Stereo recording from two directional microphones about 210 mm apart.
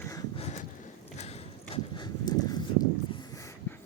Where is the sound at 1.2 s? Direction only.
30° left (ahead or behind).